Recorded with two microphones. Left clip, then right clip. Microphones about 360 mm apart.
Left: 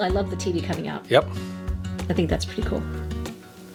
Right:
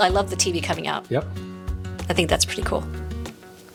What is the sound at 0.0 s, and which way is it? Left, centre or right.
Speech, right.